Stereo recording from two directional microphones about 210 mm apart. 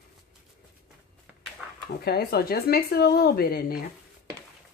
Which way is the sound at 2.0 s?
50° left (ahead or behind).